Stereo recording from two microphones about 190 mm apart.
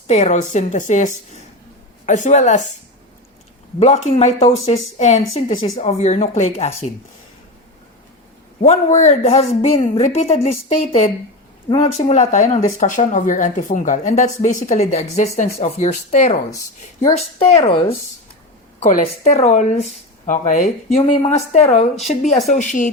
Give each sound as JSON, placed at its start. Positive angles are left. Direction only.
{"t": 0.1, "sound": "speech", "side_deg": 40}
{"t": 3.8, "sound": "speech", "side_deg": 40}
{"t": 8.6, "sound": "speech", "side_deg": 35}
{"t": 18.8, "sound": "speech", "side_deg": 40}